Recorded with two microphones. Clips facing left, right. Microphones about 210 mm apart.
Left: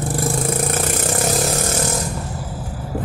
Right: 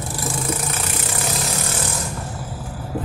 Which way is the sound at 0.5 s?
50° left (ahead or behind).